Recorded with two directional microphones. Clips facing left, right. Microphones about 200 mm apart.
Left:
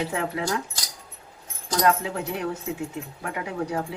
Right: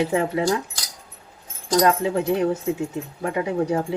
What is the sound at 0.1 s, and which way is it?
Speech, 20° right (ahead or behind).